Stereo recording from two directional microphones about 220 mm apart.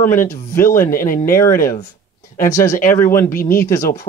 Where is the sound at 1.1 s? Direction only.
40° left (ahead or behind).